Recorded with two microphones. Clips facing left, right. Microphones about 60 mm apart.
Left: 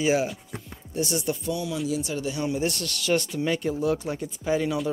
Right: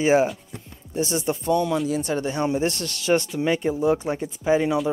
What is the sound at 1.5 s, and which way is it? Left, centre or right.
Speech, right.